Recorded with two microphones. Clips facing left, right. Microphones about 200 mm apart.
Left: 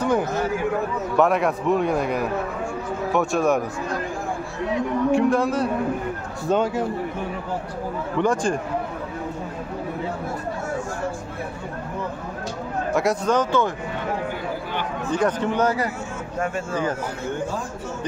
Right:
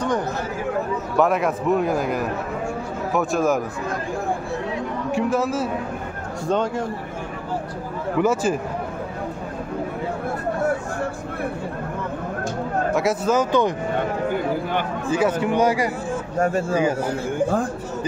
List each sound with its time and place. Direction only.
1.1 s a man's voice: centre (ahead or behind)
5.1 s a man's voice: centre (ahead or behind)
8.2 s a man's voice: 5° right (ahead or behind)
12.9 s a man's voice: 5° right (ahead or behind)
13.5 s speech: 15° right (ahead or behind)
15.0 s speech: 5° right (ahead or behind)
16.3 s speech: 35° right (ahead or behind)